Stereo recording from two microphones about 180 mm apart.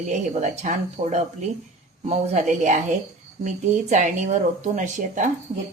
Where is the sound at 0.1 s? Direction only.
45° right (ahead or behind).